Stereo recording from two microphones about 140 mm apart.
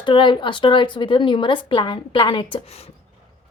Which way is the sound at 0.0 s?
35° left (ahead or behind).